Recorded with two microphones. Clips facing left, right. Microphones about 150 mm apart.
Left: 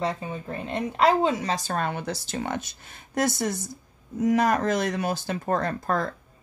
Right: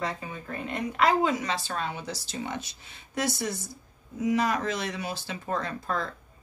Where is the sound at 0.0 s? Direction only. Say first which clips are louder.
Left 5 dB; 25° left (ahead or behind).